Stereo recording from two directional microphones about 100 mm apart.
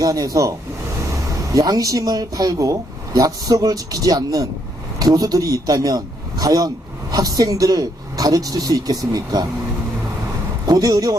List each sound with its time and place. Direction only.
0.0 s speech: 35° right (ahead or behind)
1.5 s a man's voice: 35° right (ahead or behind)
10.7 s speech: 40° right (ahead or behind)